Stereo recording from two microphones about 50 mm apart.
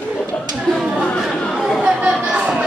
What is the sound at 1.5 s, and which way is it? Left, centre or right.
Chatter, centre.